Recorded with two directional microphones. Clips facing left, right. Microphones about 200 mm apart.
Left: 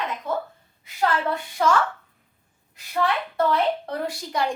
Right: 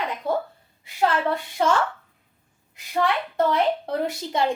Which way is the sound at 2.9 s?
20° right (ahead or behind).